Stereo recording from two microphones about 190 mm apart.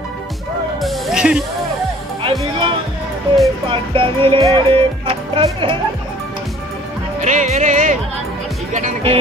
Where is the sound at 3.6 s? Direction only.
25° right (ahead or behind).